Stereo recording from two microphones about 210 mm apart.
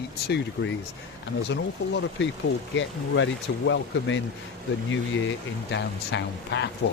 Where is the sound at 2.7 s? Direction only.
60° left (ahead or behind).